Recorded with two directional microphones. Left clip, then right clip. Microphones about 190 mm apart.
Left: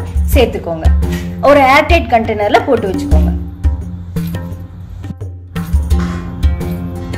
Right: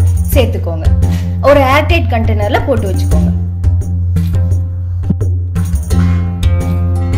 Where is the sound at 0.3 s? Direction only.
35° right (ahead or behind).